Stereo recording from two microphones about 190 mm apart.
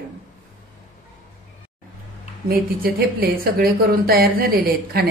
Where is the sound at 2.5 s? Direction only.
50° right (ahead or behind).